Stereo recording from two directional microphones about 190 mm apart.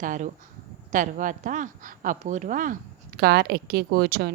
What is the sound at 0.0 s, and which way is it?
A woman's voice, 45° right (ahead or behind).